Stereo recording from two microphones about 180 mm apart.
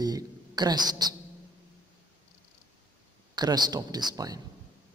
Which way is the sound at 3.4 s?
20° right (ahead or behind).